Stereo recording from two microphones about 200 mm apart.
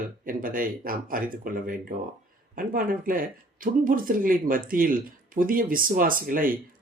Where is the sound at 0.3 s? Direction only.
45° right (ahead or behind).